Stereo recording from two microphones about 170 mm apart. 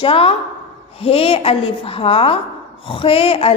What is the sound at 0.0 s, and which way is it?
A woman's voice, 35° left (ahead or behind).